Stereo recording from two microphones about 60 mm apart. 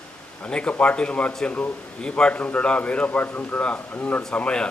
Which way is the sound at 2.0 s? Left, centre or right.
Centre.